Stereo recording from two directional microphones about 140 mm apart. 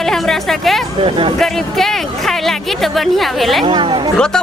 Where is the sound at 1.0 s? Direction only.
40° right (ahead or behind).